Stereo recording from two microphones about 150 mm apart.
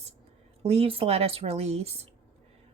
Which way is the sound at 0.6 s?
40° right (ahead or behind).